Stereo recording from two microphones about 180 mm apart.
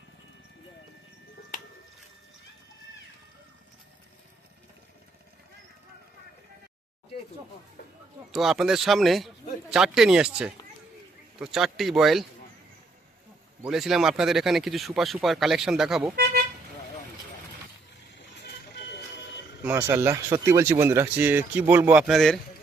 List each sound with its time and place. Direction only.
8.3 s speech: centre (ahead or behind)
13.7 s speech: centre (ahead or behind)
18.4 s vehicle: 65° left (ahead or behind)
19.6 s speech: 15° right (ahead or behind)